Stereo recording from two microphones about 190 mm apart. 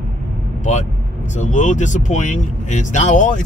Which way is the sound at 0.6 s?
40° left (ahead or behind).